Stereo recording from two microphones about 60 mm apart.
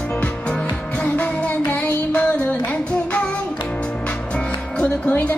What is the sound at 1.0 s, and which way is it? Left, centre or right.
Child singing, left.